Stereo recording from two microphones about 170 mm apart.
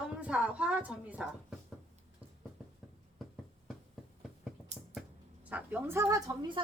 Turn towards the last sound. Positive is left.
turn(degrees=-25)  # may be behind; listen again after turning